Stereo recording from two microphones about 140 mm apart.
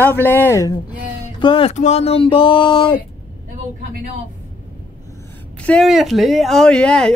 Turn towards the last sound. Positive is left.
turn(degrees=5)  # may be behind; listen again after turning